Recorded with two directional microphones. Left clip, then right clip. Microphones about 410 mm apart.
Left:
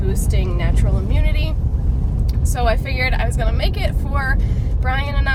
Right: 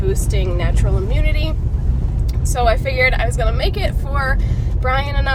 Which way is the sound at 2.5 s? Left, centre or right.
Centre.